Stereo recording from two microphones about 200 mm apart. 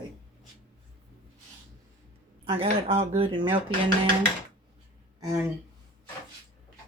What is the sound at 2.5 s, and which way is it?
Speech, 30° right (ahead or behind).